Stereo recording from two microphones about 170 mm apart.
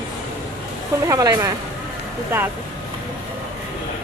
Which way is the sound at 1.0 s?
20° right (ahead or behind).